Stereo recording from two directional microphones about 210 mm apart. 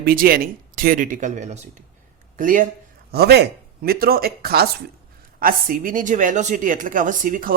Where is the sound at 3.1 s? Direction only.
50° right (ahead or behind).